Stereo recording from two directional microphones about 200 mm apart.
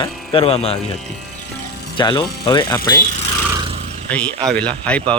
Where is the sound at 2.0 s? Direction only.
25° left (ahead or behind).